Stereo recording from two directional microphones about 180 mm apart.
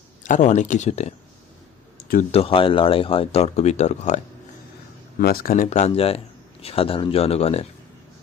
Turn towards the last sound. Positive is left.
turn(degrees=35)  # may be behind; listen again after turning